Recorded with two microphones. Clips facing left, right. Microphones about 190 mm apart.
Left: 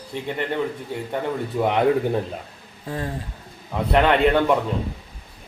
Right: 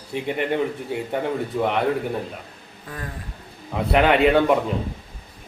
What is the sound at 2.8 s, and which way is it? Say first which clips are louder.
Speech: left 6 dB; 30° left (ahead or behind).